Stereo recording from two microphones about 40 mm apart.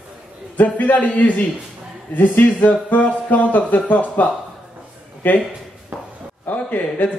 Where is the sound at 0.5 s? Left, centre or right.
Left.